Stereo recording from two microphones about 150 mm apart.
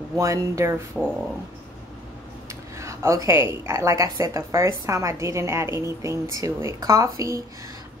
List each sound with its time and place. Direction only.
0.2 s a woman's voice: 20° right (ahead or behind)
1.0 s speech: centre (ahead or behind)
2.8 s a woman's voice: 20° right (ahead or behind)